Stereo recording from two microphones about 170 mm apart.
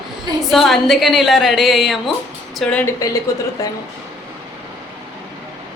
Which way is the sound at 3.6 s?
20° left (ahead or behind).